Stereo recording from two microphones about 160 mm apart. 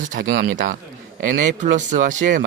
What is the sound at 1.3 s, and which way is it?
A man's voice, 50° right (ahead or behind).